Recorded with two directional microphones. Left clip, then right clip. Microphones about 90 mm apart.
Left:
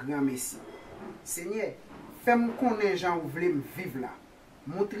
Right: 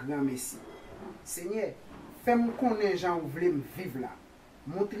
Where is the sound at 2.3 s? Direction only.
10° left (ahead or behind).